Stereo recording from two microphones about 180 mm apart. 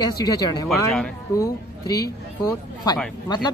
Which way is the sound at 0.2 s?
20° left (ahead or behind).